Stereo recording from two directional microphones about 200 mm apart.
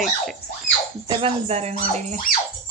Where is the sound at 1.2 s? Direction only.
30° right (ahead or behind).